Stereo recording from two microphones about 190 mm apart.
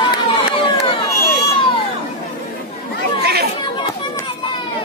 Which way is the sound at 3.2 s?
55° right (ahead or behind).